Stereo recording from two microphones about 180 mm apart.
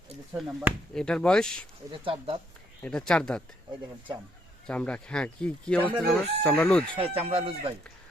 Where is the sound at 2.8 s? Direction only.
5° left (ahead or behind).